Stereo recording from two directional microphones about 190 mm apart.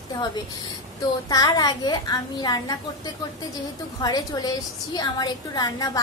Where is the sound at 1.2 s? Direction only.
20° left (ahead or behind).